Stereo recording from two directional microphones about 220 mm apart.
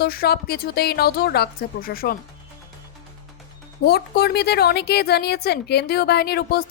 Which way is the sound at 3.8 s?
45° left (ahead or behind).